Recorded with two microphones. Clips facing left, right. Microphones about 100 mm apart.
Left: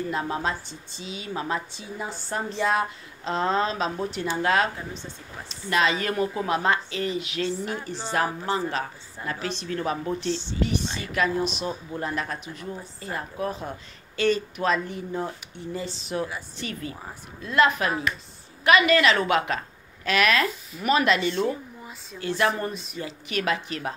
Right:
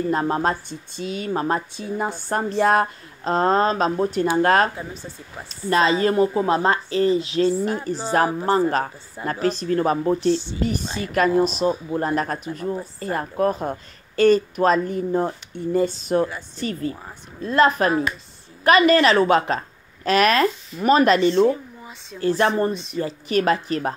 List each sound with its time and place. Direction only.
0.1 s speech: 45° right (ahead or behind)
5.5 s speech: 35° right (ahead or behind)